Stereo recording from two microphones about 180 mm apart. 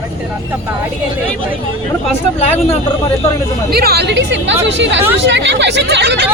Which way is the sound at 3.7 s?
60° right (ahead or behind).